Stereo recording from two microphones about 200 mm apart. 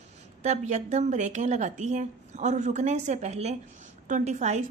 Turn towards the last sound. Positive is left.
turn(degrees=-35)  # may be behind; listen again after turning